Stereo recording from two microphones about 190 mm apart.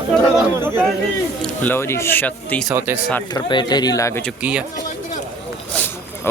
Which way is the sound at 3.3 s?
25° left (ahead or behind).